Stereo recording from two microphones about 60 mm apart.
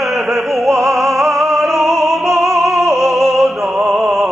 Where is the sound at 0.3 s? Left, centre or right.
Centre.